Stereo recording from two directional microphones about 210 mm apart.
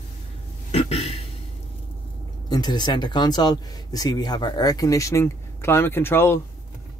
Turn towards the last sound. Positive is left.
turn(degrees=10)  # may be behind; listen again after turning